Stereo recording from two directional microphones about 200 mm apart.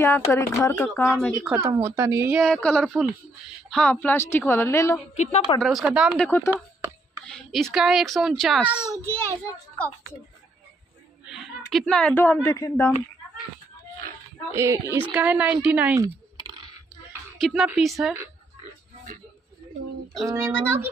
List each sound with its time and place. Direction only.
0.0 s a woman's voice: 15° left (ahead or behind)
1.1 s a child's voice: centre (ahead or behind)
1.6 s a woman's voice: 15° right (ahead or behind)
2.4 s a child's voice: 5° left (ahead or behind)
5.1 s a woman's voice: 35° left (ahead or behind)
5.6 s a child's voice: centre (ahead or behind)
6.5 s a sound: 10° right (ahead or behind)
7.2 s a child's voice: 5° left (ahead or behind)
11.2 s speech: centre (ahead or behind)
14.5 s a woman's voice: 15° right (ahead or behind)
17.4 s a child's voice: centre (ahead or behind)
20.2 s a woman's voice: 10° right (ahead or behind)